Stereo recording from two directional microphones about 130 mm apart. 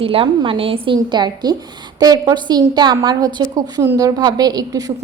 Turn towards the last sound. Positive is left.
turn(degrees=-30)  # may be behind; listen again after turning